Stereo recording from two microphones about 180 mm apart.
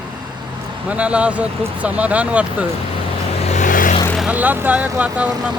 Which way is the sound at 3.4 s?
40° left (ahead or behind).